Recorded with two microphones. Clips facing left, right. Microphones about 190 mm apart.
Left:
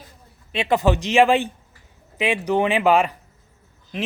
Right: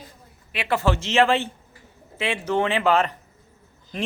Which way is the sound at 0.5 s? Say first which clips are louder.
Left 4 dB; 20° left (ahead or behind).